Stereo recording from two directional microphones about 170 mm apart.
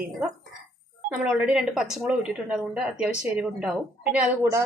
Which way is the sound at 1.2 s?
5° right (ahead or behind).